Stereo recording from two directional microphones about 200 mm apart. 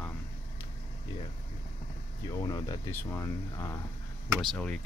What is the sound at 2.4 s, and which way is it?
Speech, 20° left (ahead or behind).